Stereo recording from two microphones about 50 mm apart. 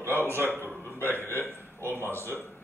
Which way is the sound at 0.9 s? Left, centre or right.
Left.